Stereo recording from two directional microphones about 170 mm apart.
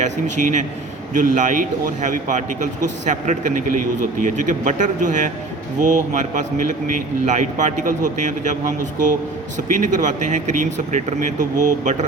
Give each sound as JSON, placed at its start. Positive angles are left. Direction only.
{"t": 0.0, "sound": "a man's voice", "side_deg": -45}